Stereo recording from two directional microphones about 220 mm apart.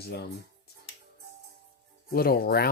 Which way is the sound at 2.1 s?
45° left (ahead or behind).